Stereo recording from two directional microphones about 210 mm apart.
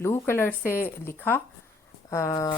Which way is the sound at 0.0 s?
10° left (ahead or behind).